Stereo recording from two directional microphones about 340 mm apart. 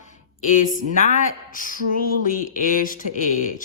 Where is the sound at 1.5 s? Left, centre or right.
Left.